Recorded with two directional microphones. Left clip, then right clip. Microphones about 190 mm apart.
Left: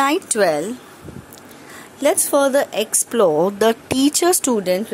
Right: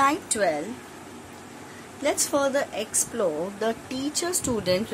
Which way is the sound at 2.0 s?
40° left (ahead or behind).